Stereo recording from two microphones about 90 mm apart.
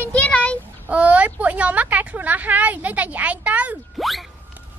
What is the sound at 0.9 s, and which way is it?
A woman's voice, 15° right (ahead or behind).